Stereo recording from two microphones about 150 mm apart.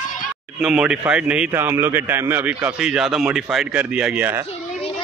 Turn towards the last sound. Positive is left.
turn(degrees=-10)  # may be behind; listen again after turning